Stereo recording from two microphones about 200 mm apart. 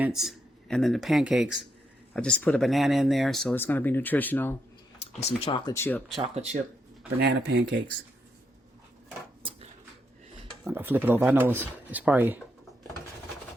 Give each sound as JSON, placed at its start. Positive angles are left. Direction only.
{"t": 0.0, "sound": "speech", "side_deg": 0}
{"t": 5.5, "sound": "speech", "side_deg": 25}
{"t": 5.7, "sound": "speech", "side_deg": 10}
{"t": 6.3, "sound": "speech", "side_deg": -35}
{"t": 7.2, "sound": "speech", "side_deg": -55}
{"t": 10.6, "sound": "speech", "side_deg": -10}